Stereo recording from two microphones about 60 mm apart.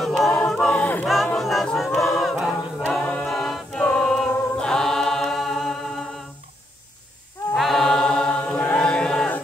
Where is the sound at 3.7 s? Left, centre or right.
Centre.